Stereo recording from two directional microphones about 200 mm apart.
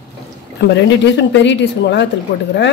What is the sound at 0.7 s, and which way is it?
Speech, 60° left (ahead or behind).